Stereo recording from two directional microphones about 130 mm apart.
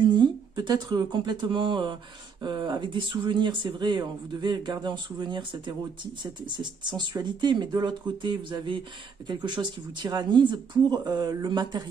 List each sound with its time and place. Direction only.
0.0 s speech: 35° right (ahead or behind)